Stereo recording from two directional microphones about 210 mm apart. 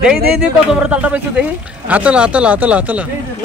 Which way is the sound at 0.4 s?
5° right (ahead or behind).